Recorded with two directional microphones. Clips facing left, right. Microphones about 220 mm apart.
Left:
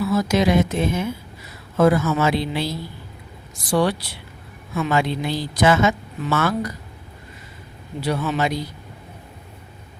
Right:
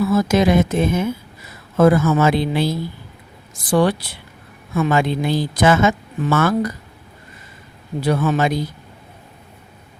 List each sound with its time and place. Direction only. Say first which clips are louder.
0.1 s speech: right 1 dB; 50° right (ahead or behind)
8.0 s speech: right 4 dB; 50° right (ahead or behind)